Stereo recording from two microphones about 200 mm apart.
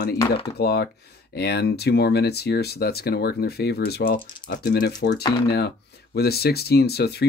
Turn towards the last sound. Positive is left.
turn(degrees=55)  # may be behind; listen again after turning